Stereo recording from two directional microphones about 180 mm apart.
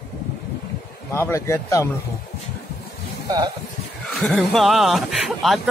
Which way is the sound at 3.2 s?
20° right (ahead or behind).